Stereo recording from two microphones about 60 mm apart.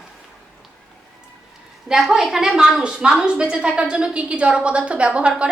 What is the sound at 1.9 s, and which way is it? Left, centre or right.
A woman's voice, centre.